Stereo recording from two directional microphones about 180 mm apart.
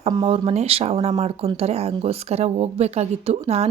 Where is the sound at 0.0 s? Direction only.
30° right (ahead or behind).